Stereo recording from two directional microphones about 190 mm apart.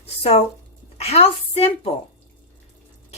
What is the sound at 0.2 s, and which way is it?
A woman's voice, 30° left (ahead or behind).